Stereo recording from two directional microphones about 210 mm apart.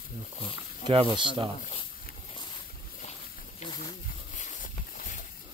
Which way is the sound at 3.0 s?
35° left (ahead or behind).